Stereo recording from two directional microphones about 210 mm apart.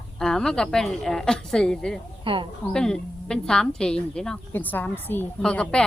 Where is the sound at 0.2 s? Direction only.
5° left (ahead or behind).